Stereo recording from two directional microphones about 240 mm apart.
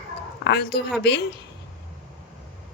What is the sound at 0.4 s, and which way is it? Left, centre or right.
Speech, left.